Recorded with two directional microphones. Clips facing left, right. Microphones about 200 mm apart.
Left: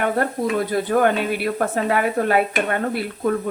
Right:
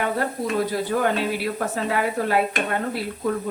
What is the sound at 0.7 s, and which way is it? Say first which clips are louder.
A woman's voice: left 4 dB; 55° left (ahead or behind).